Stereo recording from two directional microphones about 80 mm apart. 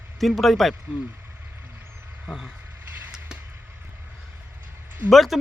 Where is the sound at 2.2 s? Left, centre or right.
Centre.